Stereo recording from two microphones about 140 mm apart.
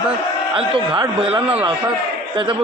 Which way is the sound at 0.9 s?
40° right (ahead or behind).